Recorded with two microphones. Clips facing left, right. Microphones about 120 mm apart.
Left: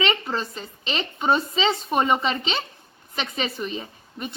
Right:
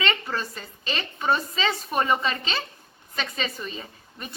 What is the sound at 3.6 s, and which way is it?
Speech, 15° left (ahead or behind).